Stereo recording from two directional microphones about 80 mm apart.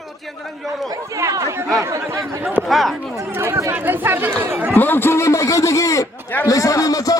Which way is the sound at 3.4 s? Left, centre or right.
Right.